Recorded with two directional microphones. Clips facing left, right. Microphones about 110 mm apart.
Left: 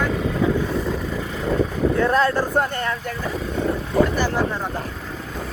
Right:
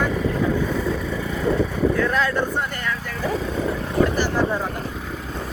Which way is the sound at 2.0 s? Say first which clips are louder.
Left 3 dB; 35° left (ahead or behind).